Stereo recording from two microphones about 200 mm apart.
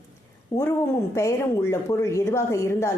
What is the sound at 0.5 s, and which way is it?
A woman's voice, 15° left (ahead or behind).